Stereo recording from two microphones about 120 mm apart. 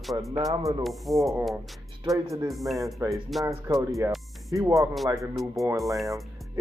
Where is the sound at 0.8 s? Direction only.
Centre (ahead or behind).